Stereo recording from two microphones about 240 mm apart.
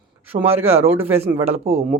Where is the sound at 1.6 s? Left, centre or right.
Right.